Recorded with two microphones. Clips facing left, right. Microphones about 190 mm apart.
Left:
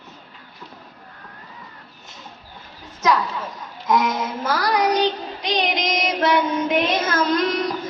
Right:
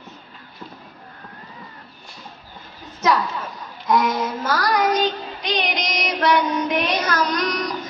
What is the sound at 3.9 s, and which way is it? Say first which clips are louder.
Child singing: right 1 dB; 20° left (ahead or behind).